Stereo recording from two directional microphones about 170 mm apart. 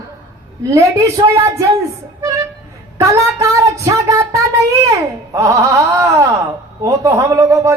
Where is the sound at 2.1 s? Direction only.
20° right (ahead or behind).